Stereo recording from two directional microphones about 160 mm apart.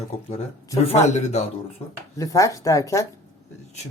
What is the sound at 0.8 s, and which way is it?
Speech, 40° left (ahead or behind).